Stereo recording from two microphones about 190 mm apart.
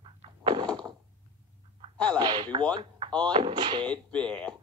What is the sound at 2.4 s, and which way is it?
Speech, 25° right (ahead or behind).